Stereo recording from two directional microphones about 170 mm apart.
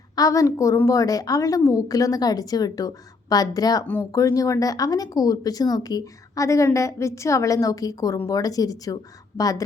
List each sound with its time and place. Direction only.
0.2 s speech: 20° left (ahead or behind)